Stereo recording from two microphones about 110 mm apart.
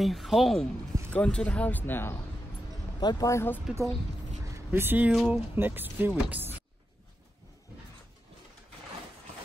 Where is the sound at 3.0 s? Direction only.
40° left (ahead or behind).